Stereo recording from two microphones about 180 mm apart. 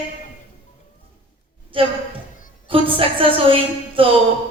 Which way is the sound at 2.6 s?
30° right (ahead or behind).